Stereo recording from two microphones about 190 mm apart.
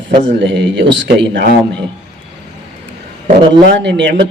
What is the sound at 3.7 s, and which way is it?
Speech, 65° right (ahead or behind).